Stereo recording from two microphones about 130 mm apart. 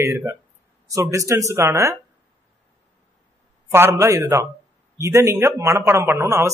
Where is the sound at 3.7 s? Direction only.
20° right (ahead or behind).